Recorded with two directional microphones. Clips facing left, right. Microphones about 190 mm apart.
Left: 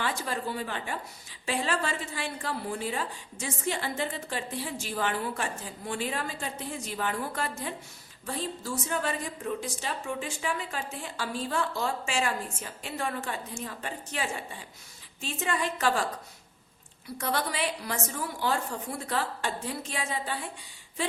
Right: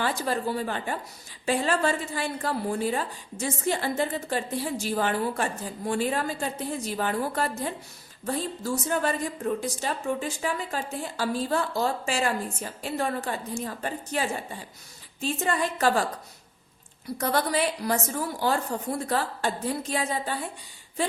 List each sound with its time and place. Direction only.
0.0 s a woman's voice: 40° right (ahead or behind)
17.2 s a woman's voice: 40° right (ahead or behind)